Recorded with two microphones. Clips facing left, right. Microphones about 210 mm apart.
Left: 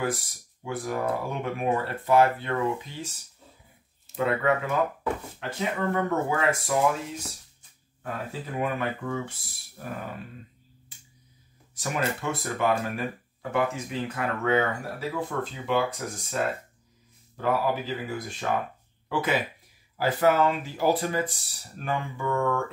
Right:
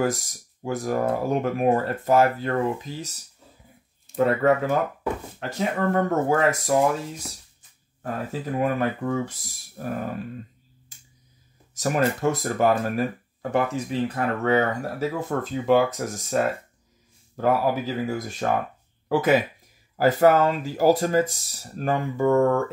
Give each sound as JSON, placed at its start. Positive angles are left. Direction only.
{"t": 0.0, "sound": "speech", "side_deg": -40}
{"t": 4.2, "sound": "speech", "side_deg": -40}
{"t": 8.0, "sound": "speech", "side_deg": -40}
{"t": 11.7, "sound": "speech", "side_deg": -40}